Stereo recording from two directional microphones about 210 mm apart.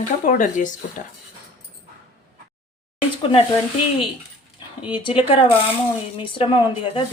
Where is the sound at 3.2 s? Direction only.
25° left (ahead or behind).